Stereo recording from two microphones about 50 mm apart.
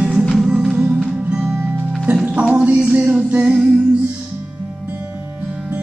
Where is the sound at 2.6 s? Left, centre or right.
Right.